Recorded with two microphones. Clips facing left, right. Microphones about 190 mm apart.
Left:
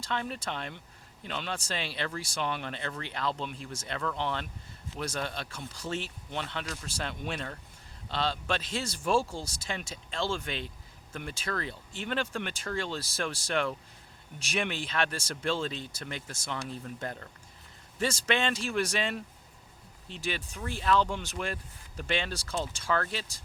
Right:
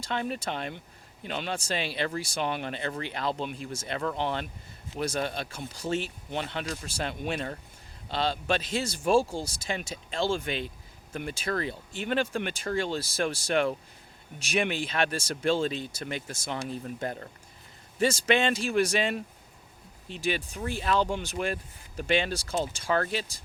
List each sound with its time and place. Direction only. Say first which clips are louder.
0.1 s speech: right 3 dB; 15° right (ahead or behind)